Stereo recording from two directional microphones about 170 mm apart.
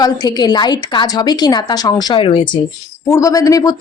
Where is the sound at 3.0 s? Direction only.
20° left (ahead or behind).